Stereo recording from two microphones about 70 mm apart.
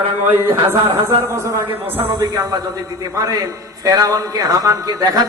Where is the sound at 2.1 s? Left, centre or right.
Right.